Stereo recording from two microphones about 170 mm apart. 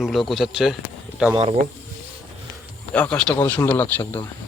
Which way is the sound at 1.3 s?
35° right (ahead or behind).